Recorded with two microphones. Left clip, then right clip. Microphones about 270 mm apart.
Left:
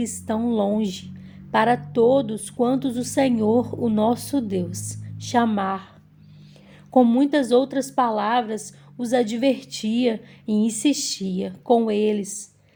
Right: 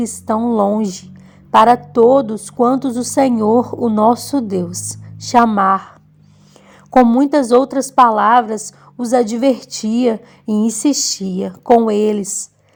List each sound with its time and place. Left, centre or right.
0.0 s a woman's voice: right
6.9 s a woman's voice: right